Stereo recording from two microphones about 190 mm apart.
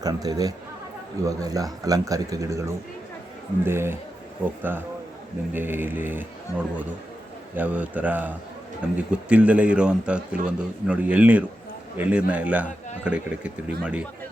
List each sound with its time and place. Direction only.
0.0 s a man's voice: 20° right (ahead or behind)
5.5 s a man's voice: 10° right (ahead or behind)
6.5 s speech: 15° left (ahead or behind)
7.5 s a man's voice: 10° right (ahead or behind)